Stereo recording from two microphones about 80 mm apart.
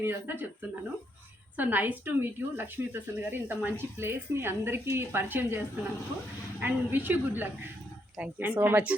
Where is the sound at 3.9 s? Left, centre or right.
Right.